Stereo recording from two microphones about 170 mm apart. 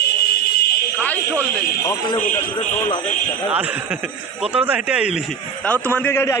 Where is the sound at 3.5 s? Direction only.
10° right (ahead or behind).